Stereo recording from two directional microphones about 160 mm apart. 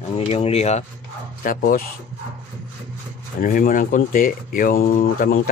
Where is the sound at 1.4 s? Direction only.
60° left (ahead or behind).